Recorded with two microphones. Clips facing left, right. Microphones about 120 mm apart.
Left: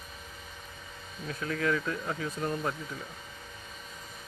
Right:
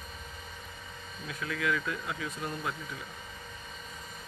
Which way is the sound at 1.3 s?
40° left (ahead or behind).